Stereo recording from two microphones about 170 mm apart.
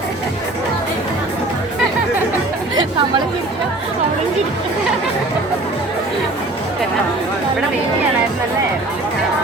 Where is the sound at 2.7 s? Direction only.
25° right (ahead or behind).